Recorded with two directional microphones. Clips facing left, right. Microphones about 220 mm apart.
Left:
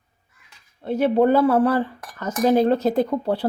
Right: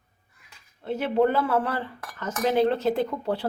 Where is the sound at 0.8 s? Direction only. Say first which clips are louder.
Left 5 dB; 40° left (ahead or behind).